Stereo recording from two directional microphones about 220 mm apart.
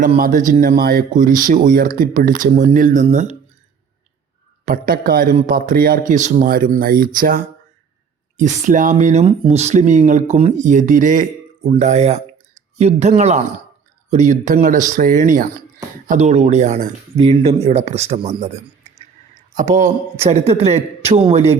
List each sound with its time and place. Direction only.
0.2 s speech: 35° right (ahead or behind)
4.6 s speech: 40° right (ahead or behind)